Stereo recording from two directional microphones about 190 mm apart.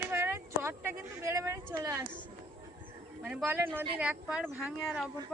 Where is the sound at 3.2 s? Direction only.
10° right (ahead or behind).